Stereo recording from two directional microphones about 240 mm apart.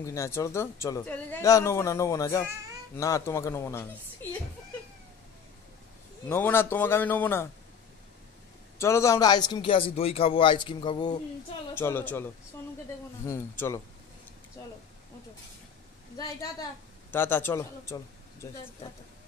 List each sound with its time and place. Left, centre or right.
0.0 s speech: centre
6.2 s speech: centre
8.7 s a man's voice: centre
13.3 s speech: centre
14.6 s a sound: centre
17.1 s a man's voice: centre